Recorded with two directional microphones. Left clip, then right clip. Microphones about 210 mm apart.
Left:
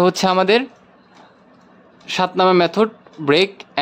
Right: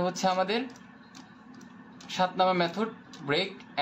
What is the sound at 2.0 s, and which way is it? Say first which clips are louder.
Speech: left 10 dB; 50° left (ahead or behind).